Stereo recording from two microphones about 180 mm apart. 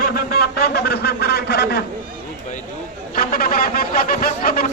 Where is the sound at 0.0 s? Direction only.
55° left (ahead or behind).